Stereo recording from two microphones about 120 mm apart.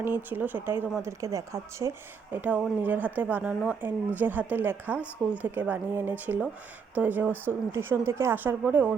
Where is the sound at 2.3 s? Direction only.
15° right (ahead or behind).